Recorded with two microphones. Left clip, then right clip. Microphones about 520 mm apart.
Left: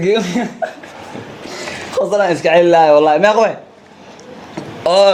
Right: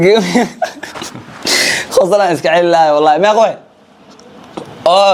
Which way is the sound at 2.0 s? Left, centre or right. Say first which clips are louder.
Right 3 dB; right.